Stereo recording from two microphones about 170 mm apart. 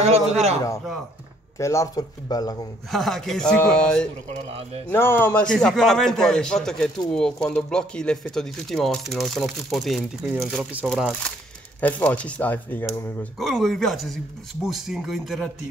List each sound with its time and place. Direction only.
0.0 s a man's voice: 40° right (ahead or behind)
1.6 s speech: 20° left (ahead or behind)
2.9 s a man's voice: centre (ahead or behind)
4.3 s a man's voice: 35° right (ahead or behind)
4.8 s a man's voice: 15° left (ahead or behind)